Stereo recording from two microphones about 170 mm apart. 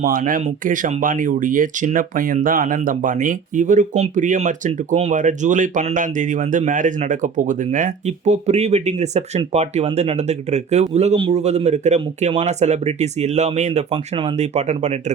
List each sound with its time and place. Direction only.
0.0 s speech: 55° right (ahead or behind)